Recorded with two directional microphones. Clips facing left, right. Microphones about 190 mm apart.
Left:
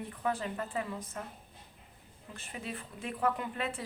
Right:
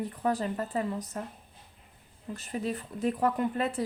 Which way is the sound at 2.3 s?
40° right (ahead or behind).